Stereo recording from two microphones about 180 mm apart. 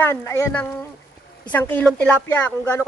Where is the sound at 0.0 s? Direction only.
15° left (ahead or behind).